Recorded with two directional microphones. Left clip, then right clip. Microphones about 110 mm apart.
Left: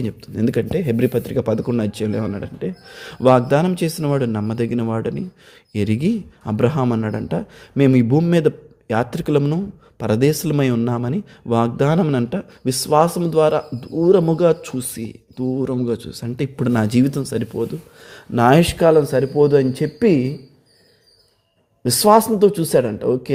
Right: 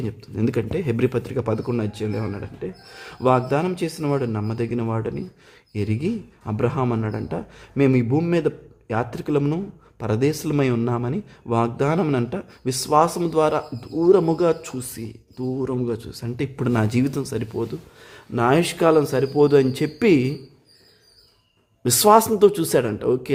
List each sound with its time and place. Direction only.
0.0 s speech: 25° left (ahead or behind)
0.4 s speech: 10° left (ahead or behind)
1.8 s speech: 35° left (ahead or behind)
5.7 s speech: 35° left (ahead or behind); by 17.7 s 10° left (ahead or behind)
18.3 s speech: 45° left (ahead or behind)
18.8 s speech: 15° left (ahead or behind)
19.4 s speech: centre (ahead or behind)
21.8 s speech: centre (ahead or behind)